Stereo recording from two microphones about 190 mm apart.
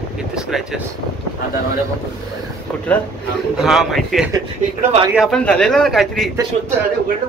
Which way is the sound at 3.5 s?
Centre (ahead or behind).